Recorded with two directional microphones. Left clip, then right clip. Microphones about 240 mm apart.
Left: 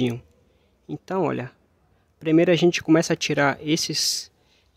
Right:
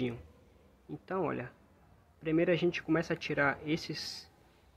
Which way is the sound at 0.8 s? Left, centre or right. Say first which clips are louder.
Left 10 dB; left.